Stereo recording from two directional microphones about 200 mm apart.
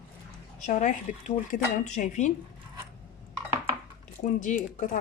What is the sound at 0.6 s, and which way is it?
A woman's voice, 40° left (ahead or behind).